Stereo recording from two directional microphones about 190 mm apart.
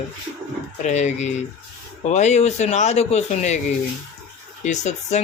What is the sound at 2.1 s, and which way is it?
Speech, 40° left (ahead or behind).